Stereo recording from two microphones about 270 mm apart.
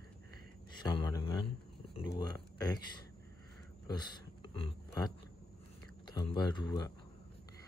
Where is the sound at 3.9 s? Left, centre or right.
Centre.